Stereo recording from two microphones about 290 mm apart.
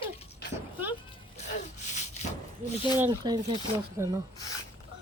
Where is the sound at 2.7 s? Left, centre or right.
Centre.